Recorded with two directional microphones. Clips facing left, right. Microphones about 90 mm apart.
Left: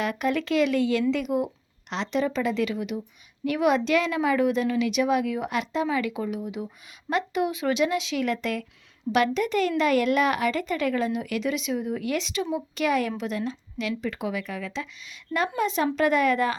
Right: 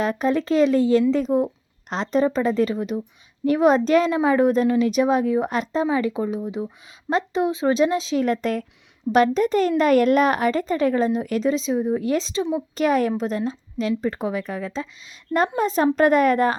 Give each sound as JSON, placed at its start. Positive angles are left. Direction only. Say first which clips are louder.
{"t": 0.0, "sound": "speech", "louder": "right 5 dB", "side_deg": -35}